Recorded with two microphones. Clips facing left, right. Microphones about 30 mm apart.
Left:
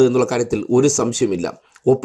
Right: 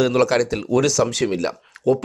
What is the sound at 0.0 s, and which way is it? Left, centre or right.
Speech, right.